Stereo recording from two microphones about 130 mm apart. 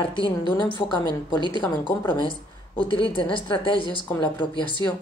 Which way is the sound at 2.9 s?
40° left (ahead or behind).